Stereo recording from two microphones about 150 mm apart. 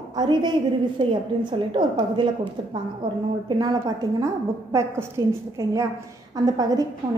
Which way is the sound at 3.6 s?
25° right (ahead or behind).